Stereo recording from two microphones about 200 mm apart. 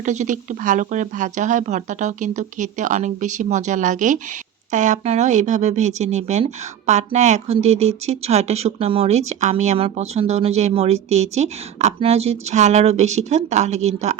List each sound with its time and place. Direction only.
0.0 s speech: 40° right (ahead or behind)